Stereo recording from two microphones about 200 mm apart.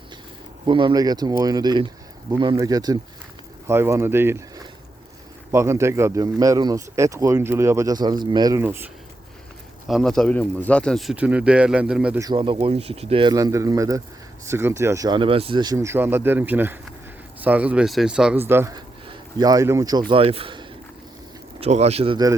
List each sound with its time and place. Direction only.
0.6 s speech: 25° right (ahead or behind)
9.8 s speech: centre (ahead or behind)
12.2 s speech: 25° right (ahead or behind)